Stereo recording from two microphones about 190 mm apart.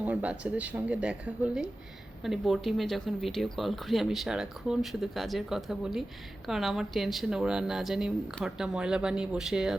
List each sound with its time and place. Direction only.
0.0 s speech: 5° right (ahead or behind)